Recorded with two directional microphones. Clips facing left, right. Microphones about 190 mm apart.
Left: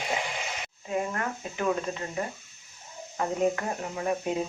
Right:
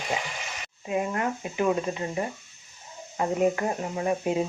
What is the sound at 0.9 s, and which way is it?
A woman's voice, 15° right (ahead or behind).